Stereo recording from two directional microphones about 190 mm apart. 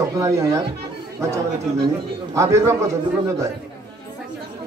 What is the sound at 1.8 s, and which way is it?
A man's voice, 15° right (ahead or behind).